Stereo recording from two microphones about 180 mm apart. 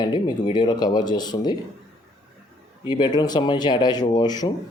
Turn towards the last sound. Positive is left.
turn(degrees=20)  # may be behind; listen again after turning